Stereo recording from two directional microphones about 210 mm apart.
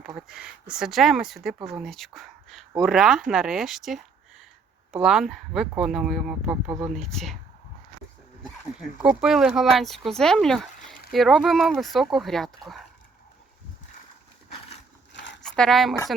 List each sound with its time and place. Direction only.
0.2 s speech: 5° right (ahead or behind)
9.0 s speech: 5° right (ahead or behind)
15.1 s a sound: 60° left (ahead or behind)
15.4 s speech: 5° left (ahead or behind)